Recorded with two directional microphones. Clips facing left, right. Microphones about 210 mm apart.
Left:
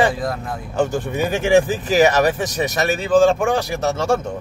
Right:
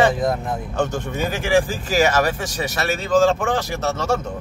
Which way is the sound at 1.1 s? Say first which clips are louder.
Left 4 dB; 20° left (ahead or behind).